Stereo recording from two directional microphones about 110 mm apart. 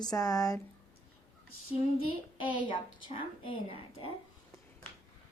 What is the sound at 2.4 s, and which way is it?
A woman's voice, 50° left (ahead or behind).